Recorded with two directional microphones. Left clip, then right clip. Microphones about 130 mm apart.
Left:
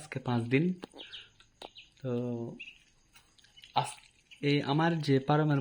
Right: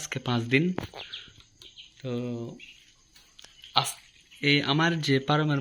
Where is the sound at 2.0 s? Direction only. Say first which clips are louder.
Right 1 dB; 25° left (ahead or behind).